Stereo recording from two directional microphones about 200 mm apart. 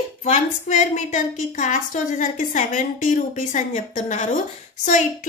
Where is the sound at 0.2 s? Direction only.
40° left (ahead or behind).